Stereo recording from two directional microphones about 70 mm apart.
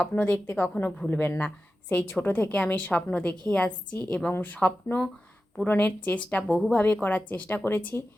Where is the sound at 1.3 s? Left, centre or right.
Centre.